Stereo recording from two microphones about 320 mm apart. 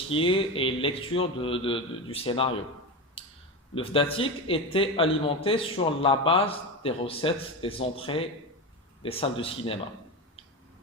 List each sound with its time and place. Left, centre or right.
0.1 s speech: centre
3.2 s a sound: centre
3.8 s speech: centre